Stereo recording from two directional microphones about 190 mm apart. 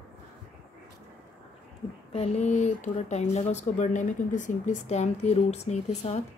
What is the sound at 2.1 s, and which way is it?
Speech, 35° left (ahead or behind).